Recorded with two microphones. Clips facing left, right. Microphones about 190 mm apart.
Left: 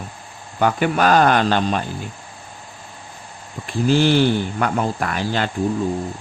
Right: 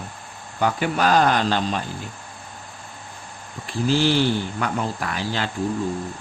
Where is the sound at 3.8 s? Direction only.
55° left (ahead or behind).